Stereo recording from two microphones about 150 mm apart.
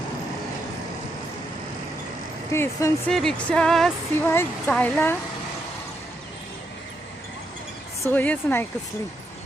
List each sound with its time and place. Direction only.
2.5 s speech: 20° left (ahead or behind)
3.1 s speech: 5° left (ahead or behind)
4.3 s speech: 15° left (ahead or behind)
8.0 s speech: 10° left (ahead or behind)